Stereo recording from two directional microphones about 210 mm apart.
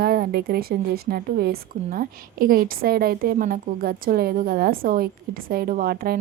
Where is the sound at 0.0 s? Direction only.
45° right (ahead or behind).